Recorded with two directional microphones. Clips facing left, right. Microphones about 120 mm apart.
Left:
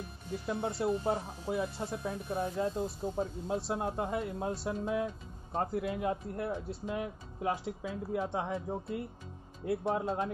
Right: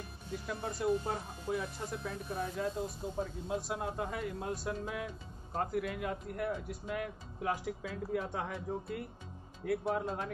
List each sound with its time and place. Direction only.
0.5 s speech: 25° left (ahead or behind)